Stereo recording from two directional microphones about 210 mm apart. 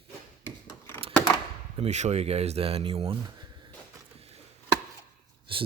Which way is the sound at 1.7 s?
30° right (ahead or behind).